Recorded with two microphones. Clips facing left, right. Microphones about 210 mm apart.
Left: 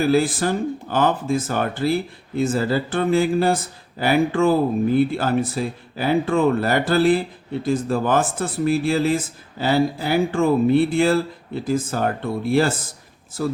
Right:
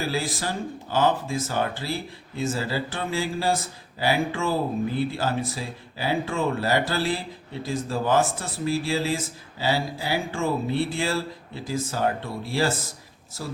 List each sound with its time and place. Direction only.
0.1 s speech: 55° left (ahead or behind)